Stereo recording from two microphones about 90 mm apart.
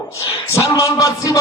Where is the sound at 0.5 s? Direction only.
40° left (ahead or behind).